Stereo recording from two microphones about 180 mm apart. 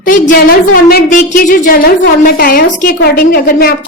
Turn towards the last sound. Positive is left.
turn(degrees=55)  # may be behind; listen again after turning